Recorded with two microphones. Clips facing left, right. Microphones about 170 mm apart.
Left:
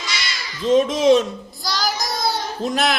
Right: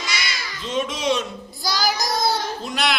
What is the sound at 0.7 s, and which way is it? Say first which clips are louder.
Speech: left 9 dB; 45° left (ahead or behind).